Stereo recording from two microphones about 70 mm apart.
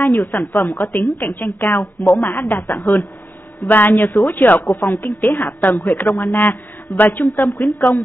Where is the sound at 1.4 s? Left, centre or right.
Left.